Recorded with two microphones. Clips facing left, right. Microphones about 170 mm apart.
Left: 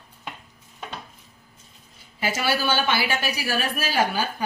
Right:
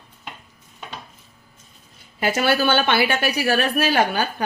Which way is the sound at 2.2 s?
55° right (ahead or behind).